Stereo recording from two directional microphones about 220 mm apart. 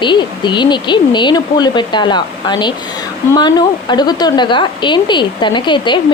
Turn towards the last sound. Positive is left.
turn(degrees=20)  # may be behind; listen again after turning